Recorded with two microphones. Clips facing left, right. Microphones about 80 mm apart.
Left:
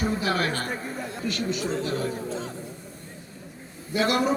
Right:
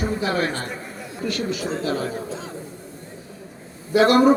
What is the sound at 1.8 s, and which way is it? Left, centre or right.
Speech, right.